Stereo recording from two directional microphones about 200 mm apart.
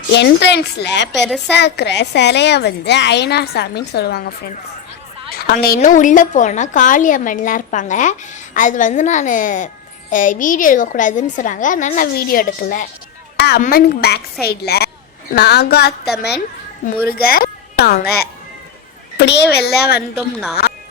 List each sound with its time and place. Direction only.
0.1 s a woman's voice: 60° left (ahead or behind)
19.1 s a woman's voice: 55° left (ahead or behind)
20.0 s a woman's voice: 5° right (ahead or behind)